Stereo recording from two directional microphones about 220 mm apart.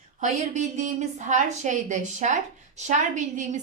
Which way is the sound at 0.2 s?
35° right (ahead or behind).